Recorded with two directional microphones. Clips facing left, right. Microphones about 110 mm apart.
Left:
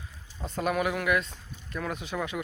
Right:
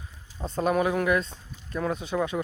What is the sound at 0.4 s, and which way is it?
Speech, 30° right (ahead or behind).